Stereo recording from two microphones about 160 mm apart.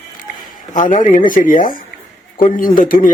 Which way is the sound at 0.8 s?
50° left (ahead or behind).